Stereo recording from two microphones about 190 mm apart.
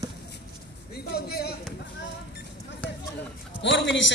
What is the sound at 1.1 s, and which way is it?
Speech, 55° left (ahead or behind).